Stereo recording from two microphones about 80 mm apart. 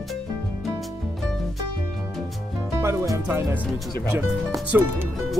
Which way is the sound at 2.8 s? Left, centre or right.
Right.